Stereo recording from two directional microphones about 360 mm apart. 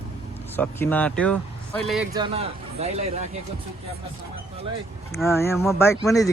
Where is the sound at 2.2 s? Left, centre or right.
Centre.